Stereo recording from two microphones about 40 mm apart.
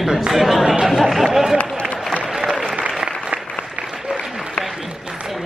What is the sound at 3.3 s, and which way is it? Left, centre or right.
Applause, right.